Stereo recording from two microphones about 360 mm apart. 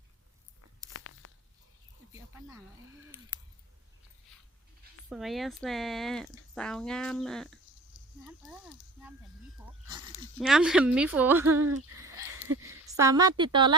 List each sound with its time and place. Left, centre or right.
0.9 s tearing: left
2.1 s snake: centre
5.0 s speech: centre
10.4 s speech: centre
11.5 s speech: right
12.0 s a sound: centre
12.6 s a woman's voice: centre